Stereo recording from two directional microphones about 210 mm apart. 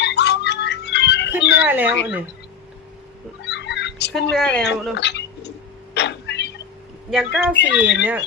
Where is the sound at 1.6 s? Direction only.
10° right (ahead or behind).